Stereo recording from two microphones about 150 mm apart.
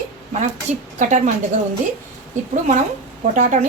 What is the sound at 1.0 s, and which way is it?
Speech, 60° right (ahead or behind).